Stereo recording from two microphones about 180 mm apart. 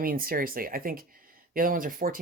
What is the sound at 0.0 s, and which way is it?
Speech, 55° right (ahead or behind).